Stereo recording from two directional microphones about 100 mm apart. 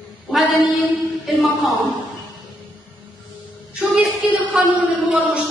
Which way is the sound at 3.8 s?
15° right (ahead or behind).